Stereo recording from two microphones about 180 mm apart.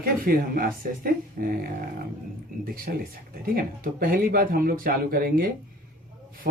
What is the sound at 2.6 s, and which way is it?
Speech, 55° right (ahead or behind).